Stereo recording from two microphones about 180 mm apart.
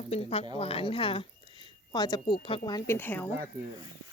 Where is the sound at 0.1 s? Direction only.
35° left (ahead or behind); by 3.2 s 10° left (ahead or behind).